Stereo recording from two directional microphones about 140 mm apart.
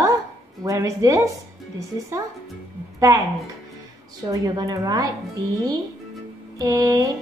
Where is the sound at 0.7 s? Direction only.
25° right (ahead or behind).